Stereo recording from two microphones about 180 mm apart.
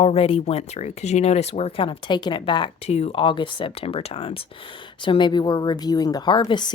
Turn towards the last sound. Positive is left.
turn(degrees=25)  # may be behind; listen again after turning